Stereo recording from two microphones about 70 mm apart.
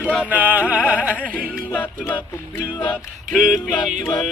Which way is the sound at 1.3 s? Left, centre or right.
Left.